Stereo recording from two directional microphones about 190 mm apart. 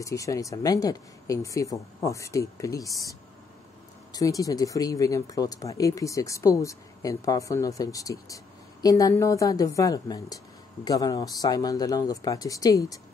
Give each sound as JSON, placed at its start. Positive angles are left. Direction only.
{"t": 0.0, "sound": "speech", "side_deg": 15}
{"t": 4.1, "sound": "speech", "side_deg": 20}